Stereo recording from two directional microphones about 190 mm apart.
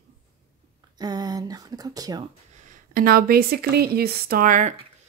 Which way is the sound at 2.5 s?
45° right (ahead or behind).